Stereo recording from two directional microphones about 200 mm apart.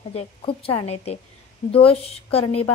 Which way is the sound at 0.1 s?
30° left (ahead or behind).